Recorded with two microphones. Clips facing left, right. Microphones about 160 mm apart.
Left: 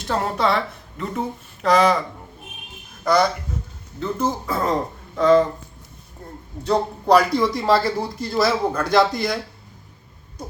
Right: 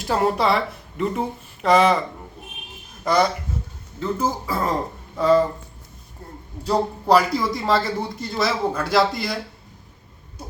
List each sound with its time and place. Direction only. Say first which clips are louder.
0.0 s speech: right 2 dB; 5° right (ahead or behind)
4.0 s speech: even; 5° right (ahead or behind)
6.7 s speech: left 1 dB; 5° right (ahead or behind)